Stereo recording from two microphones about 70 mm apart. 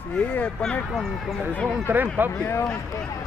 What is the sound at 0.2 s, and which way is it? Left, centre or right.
Speech, left.